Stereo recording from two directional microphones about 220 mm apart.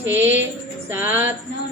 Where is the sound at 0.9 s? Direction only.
10° right (ahead or behind).